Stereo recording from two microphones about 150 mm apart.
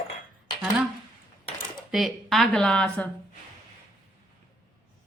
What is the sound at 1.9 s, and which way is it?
Speech, centre (ahead or behind).